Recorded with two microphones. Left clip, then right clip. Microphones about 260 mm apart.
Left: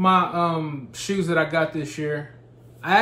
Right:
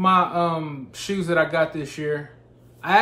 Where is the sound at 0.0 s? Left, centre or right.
Centre.